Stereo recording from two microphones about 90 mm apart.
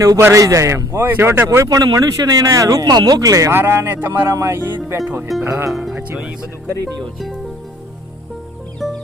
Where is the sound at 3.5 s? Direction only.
25° right (ahead or behind).